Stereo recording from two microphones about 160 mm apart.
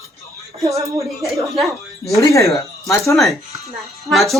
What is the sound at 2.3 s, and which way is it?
Speech, 20° left (ahead or behind).